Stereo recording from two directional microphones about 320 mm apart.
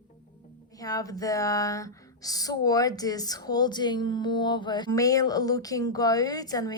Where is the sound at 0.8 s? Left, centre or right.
Centre.